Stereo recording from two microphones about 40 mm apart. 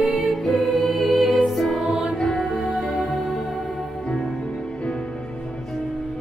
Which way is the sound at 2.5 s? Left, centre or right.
Centre.